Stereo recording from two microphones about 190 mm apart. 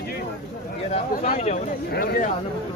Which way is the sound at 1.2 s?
35° left (ahead or behind).